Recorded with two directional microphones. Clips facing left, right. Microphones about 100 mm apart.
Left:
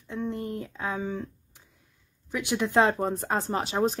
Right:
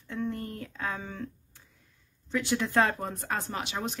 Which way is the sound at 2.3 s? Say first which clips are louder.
Left 2 dB; 15° left (ahead or behind).